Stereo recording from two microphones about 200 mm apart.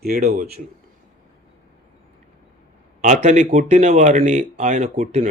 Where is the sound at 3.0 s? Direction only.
35° right (ahead or behind).